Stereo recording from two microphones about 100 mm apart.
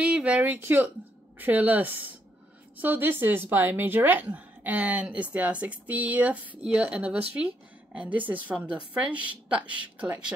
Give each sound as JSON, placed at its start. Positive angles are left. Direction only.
{"t": 0.0, "sound": "a woman's voice", "side_deg": -15}